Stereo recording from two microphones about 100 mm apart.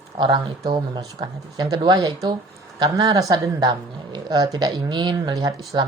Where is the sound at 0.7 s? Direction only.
50° right (ahead or behind).